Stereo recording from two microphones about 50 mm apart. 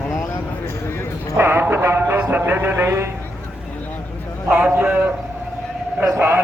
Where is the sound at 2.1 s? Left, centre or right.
Right.